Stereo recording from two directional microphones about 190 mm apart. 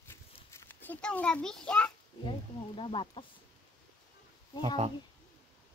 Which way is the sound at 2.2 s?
25° left (ahead or behind).